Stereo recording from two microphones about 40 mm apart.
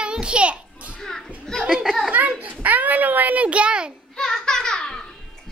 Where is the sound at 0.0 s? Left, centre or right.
Right.